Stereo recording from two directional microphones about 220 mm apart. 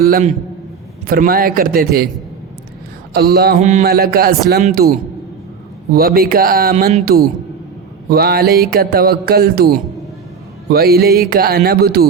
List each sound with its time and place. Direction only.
0.1 s a man's voice: 35° right (ahead or behind)
3.1 s speech: 45° right (ahead or behind)
3.6 s a man's voice: 30° right (ahead or behind)
3.8 s speech: 45° right (ahead or behind)
5.9 s speech: 45° right (ahead or behind)